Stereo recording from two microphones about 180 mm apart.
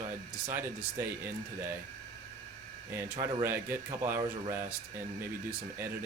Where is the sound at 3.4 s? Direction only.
15° right (ahead or behind).